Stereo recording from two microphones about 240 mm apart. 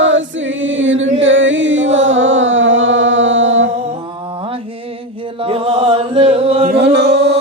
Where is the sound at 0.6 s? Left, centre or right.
Right.